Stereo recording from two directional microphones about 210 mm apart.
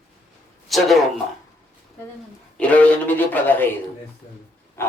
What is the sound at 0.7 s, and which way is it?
Speech, centre (ahead or behind).